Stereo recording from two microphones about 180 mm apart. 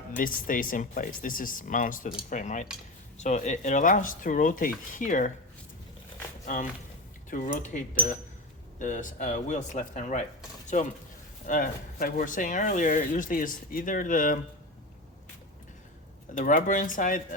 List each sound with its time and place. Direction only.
0.2 s speech: 50° left (ahead or behind)
6.4 s speech: 45° left (ahead or behind)
8.8 s speech: 45° left (ahead or behind)
11.4 s speech: 50° left (ahead or behind)
16.3 s speech: 45° left (ahead or behind)